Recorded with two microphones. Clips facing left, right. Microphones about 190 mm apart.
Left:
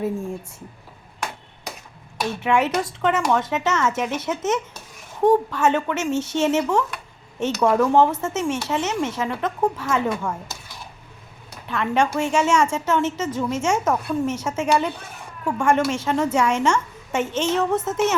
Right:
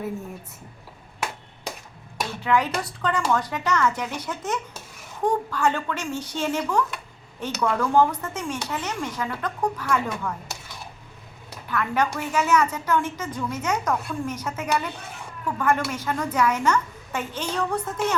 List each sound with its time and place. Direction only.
2.4 s a woman's voice: 25° left (ahead or behind)
11.7 s a woman's voice: 25° left (ahead or behind)